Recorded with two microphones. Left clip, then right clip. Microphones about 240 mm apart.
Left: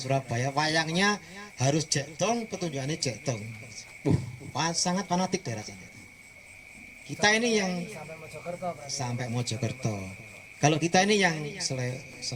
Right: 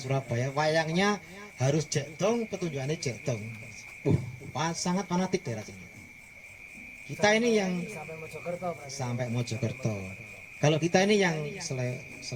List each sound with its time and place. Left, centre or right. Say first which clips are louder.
0.0 s a man's voice: left 3 dB; left
7.2 s a man's voice: even; left
8.9 s a man's voice: left 1 dB; left